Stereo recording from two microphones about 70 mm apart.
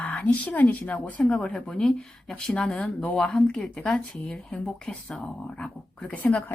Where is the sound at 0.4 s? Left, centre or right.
Left.